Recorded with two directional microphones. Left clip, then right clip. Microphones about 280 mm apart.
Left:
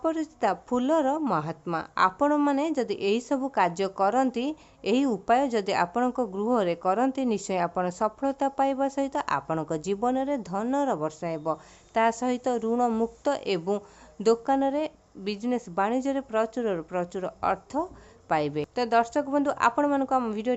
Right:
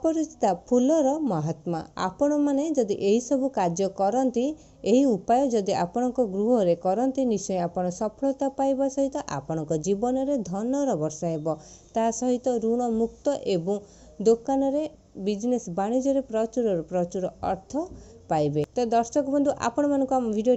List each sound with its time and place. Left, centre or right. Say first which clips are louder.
0.0 s a woman's voice: right 2 dB; centre
6.1 s speech: right 4 dB; left
6.5 s a woman's voice: right 1 dB; centre